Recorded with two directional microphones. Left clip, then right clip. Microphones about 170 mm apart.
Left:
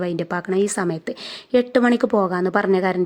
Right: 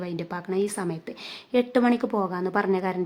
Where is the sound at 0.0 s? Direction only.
30° left (ahead or behind).